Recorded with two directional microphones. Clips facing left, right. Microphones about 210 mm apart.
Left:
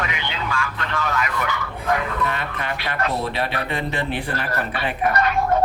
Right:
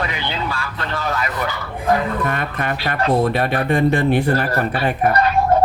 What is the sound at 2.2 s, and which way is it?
Speech, 50° right (ahead or behind).